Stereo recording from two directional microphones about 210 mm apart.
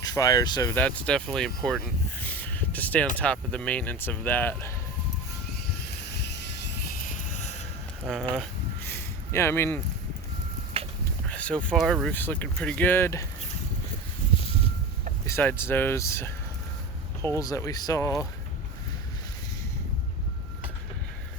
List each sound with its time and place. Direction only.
0.0 s speech: 20° left (ahead or behind)
0.8 s speech: 5° left (ahead or behind)
2.3 s a sound: 10° left (ahead or behind)
3.2 s speech: 5° left (ahead or behind)
6.1 s vehicle: 55° left (ahead or behind)
7.1 s vehicle: 35° left (ahead or behind)
8.0 s a sound: centre (ahead or behind)
10.8 s a sound: 25° right (ahead or behind)
11.3 s speech: 5° left (ahead or behind)
15.3 s speech: 10° left (ahead or behind)
17.3 s speech: 15° left (ahead or behind)